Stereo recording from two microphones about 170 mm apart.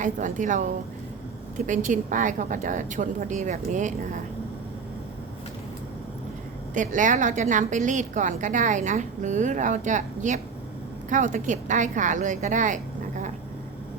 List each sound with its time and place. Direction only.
0.0 s a woman's voice: 45° right (ahead or behind)
6.7 s a woman's voice: 50° right (ahead or behind)